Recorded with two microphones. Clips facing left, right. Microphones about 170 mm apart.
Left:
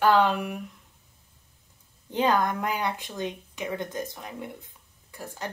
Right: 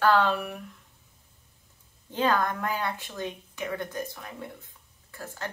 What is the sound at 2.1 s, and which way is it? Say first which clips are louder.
Speech: left 2 dB; 15° left (ahead or behind).